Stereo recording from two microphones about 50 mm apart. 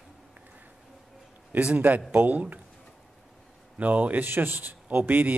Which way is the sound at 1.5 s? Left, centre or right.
Right.